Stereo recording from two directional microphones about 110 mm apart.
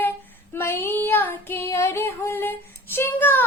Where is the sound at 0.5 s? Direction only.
20° left (ahead or behind).